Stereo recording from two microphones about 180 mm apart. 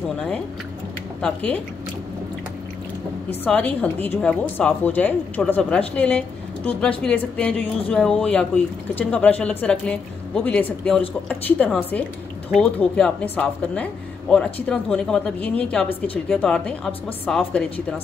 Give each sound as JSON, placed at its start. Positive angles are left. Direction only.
{"t": 1.2, "sound": "speech", "side_deg": 5}
{"t": 3.4, "sound": "speech", "side_deg": 10}